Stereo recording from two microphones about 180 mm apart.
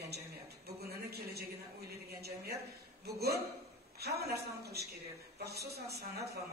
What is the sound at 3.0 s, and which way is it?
A man's voice, 60° right (ahead or behind).